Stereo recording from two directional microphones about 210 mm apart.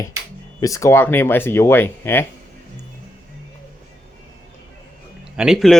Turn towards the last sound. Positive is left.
turn(degrees=0)  # may be behind; listen again after turning